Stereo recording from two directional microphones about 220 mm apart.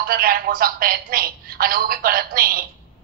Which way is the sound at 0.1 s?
40° right (ahead or behind).